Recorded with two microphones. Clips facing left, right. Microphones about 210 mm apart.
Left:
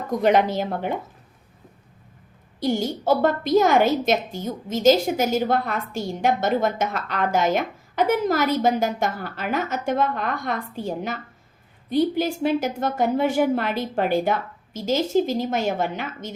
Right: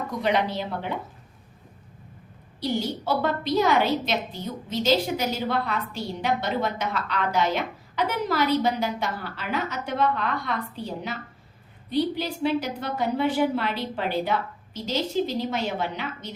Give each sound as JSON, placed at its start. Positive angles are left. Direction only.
{"t": 0.2, "sound": "a woman's voice", "side_deg": 45}
{"t": 2.6, "sound": "a woman's voice", "side_deg": 45}